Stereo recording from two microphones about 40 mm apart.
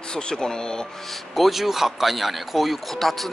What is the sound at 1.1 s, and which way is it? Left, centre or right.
A man's voice, centre.